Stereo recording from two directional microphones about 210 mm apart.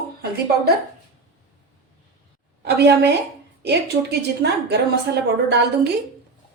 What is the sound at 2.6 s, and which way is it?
A woman's voice, 50° right (ahead or behind).